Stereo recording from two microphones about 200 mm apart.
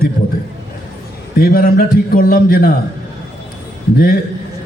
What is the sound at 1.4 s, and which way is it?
A man's voice, 45° left (ahead or behind).